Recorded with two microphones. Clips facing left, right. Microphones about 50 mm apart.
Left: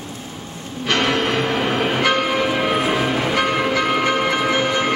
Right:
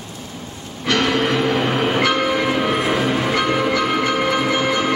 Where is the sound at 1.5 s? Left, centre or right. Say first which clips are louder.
Right 1 dB; centre.